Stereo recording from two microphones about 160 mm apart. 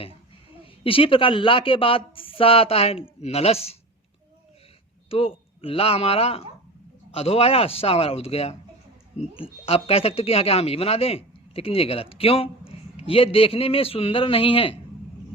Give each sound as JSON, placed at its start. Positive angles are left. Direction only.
{"t": 0.6, "sound": "speech", "side_deg": 35}
{"t": 5.0, "sound": "speech", "side_deg": 35}